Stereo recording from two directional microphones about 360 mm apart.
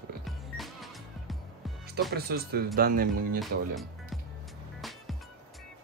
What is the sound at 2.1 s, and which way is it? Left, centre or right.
Speech, right.